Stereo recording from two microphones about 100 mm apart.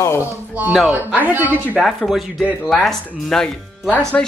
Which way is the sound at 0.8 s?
15° right (ahead or behind).